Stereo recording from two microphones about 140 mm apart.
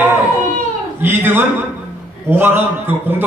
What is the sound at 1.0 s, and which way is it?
A man's voice, 15° right (ahead or behind).